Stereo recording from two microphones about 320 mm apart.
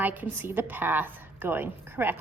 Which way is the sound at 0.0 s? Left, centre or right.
Centre.